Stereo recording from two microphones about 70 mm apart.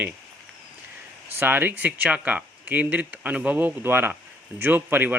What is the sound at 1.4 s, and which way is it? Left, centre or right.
Speech, right.